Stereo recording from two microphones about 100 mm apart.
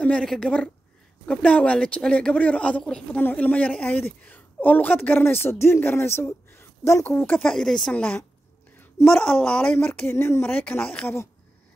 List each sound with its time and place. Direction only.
0.0 s a woman's voice: 10° left (ahead or behind); by 7.1 s 30° left (ahead or behind)
7.1 s speech: 20° left (ahead or behind)
7.4 s speech: 5° left (ahead or behind)
7.9 s speech: 15° left (ahead or behind)
8.7 s a sound: 25° left (ahead or behind)
9.1 s a woman's voice: 10° left (ahead or behind)